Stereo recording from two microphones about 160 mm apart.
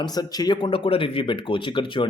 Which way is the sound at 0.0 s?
25° left (ahead or behind).